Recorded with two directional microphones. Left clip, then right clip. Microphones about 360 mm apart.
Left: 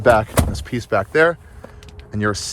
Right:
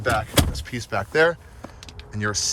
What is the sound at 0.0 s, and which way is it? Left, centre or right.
Speech, centre.